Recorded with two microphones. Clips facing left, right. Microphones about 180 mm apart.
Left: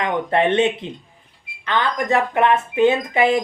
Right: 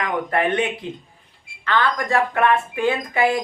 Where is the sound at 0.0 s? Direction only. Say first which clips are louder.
Left 3 dB; 25° left (ahead or behind).